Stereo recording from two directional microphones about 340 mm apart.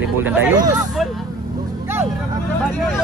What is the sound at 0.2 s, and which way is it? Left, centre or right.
Speech, centre.